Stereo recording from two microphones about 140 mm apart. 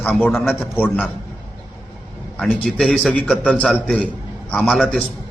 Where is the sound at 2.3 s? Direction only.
5° left (ahead or behind).